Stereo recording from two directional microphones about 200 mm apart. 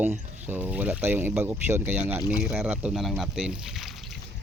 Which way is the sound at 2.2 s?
15° left (ahead or behind).